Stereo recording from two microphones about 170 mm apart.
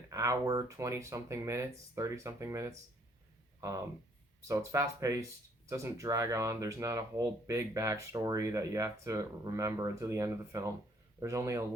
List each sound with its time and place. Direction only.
0.1 s speech: 20° right (ahead or behind)